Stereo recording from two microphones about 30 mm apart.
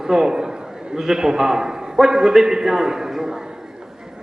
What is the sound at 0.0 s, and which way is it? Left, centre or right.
Speech, centre.